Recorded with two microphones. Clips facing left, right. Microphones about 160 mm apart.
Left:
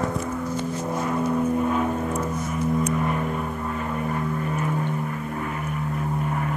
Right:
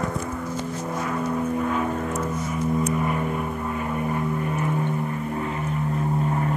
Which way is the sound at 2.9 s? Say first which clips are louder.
Even; 5° right (ahead or behind).